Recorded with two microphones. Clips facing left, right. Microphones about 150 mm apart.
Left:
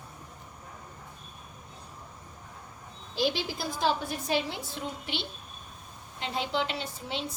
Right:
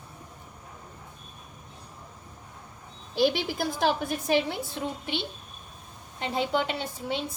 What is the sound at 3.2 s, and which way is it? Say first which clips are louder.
A woman's voice: right 5 dB; 55° right (ahead or behind).